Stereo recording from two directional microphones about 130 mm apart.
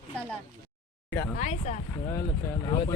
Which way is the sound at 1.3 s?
60° left (ahead or behind).